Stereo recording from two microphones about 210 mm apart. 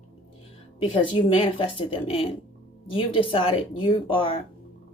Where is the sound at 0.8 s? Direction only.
25° left (ahead or behind).